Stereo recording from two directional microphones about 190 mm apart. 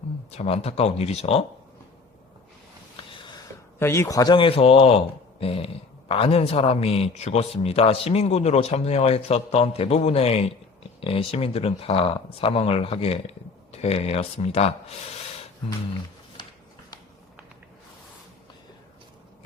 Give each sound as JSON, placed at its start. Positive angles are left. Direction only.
{"t": 0.3, "sound": "speech", "side_deg": 30}
{"t": 3.1, "sound": "a sound", "side_deg": 25}
{"t": 3.8, "sound": "speech", "side_deg": 15}